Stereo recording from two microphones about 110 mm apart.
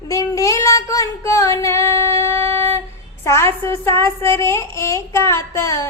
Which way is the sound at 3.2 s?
25° left (ahead or behind).